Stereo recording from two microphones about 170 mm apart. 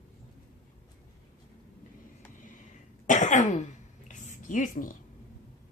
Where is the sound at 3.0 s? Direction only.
45° left (ahead or behind).